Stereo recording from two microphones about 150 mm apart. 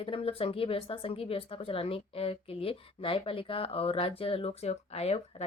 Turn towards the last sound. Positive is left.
turn(degrees=45)  # may be behind; listen again after turning